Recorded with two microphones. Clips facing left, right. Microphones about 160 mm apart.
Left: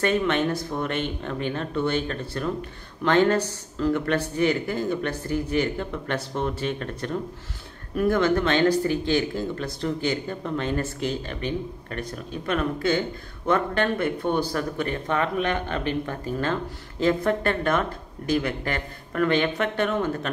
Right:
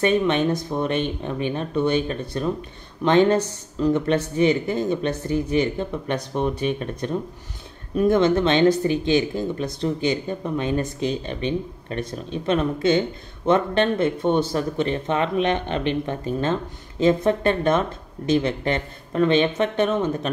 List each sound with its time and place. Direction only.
0.0 s speech: 20° right (ahead or behind)